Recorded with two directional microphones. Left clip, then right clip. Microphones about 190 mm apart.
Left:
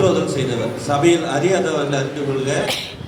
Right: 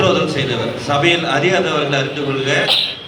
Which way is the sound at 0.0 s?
70° left (ahead or behind).